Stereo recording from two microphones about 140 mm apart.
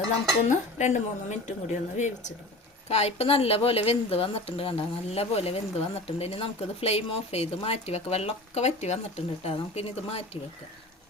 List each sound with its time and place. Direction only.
0.4 s a woman's voice: 55° left (ahead or behind)